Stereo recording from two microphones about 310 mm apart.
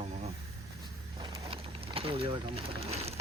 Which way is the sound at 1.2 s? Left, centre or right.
Centre.